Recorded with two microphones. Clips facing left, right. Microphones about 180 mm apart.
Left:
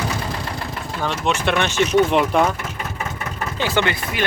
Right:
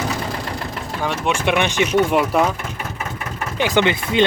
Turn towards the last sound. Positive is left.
turn(degrees=-20)  # may be behind; listen again after turning